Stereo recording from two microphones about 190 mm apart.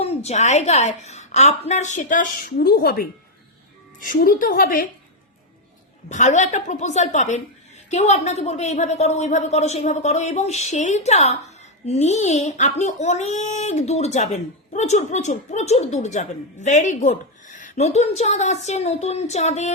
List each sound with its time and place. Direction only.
0.3 s a woman's voice: 35° left (ahead or behind)
6.1 s speech: 40° left (ahead or behind)